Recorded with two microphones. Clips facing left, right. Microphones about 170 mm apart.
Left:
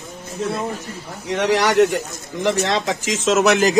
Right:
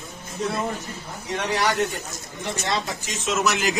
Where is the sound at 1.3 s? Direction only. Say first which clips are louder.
Left 8 dB; 90° left.